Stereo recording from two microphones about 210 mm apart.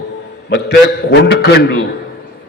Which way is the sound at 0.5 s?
55° left (ahead or behind).